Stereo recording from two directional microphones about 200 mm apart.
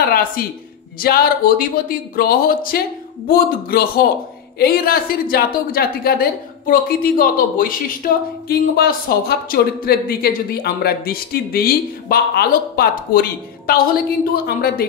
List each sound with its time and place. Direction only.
0.1 s speech: 45° left (ahead or behind)